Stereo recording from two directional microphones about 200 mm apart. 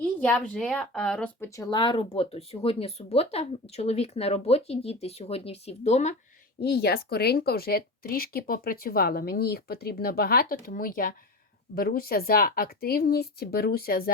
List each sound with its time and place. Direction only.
0.0 s speech: 5° left (ahead or behind)
1.5 s speech: 15° left (ahead or behind); by 6.1 s 35° left (ahead or behind)
6.6 s speech: 55° left (ahead or behind)